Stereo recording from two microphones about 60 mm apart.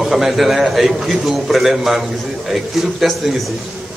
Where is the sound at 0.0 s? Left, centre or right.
Centre.